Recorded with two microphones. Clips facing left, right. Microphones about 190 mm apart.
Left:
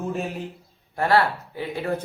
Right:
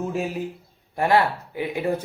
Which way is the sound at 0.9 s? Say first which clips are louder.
Right 1 dB; 15° right (ahead or behind).